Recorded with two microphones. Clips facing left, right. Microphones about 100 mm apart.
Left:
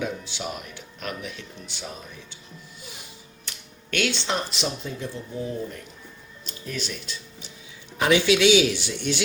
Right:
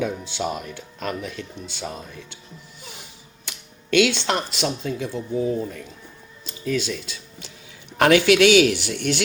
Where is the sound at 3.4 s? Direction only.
90° right.